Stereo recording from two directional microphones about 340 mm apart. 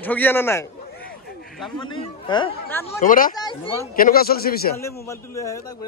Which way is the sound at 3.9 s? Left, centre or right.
Left.